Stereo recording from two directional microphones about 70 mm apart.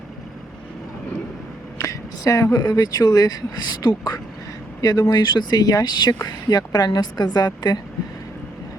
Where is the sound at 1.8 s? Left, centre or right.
Left.